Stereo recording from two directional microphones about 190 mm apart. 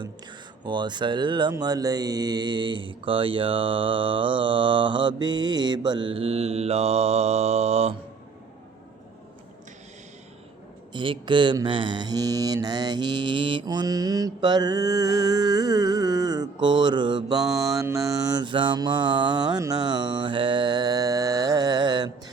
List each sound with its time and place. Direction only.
0.0 s mantra: 25° right (ahead or behind)
10.9 s mantra: 25° right (ahead or behind)